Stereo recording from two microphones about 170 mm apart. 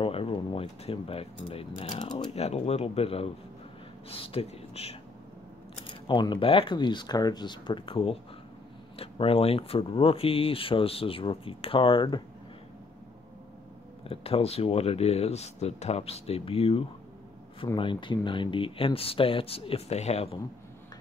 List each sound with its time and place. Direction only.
0.0 s speech: 30° left (ahead or behind)
2.3 s speech: 40° left (ahead or behind)
6.0 s speech: 25° left (ahead or behind)
14.0 s speech: 35° left (ahead or behind)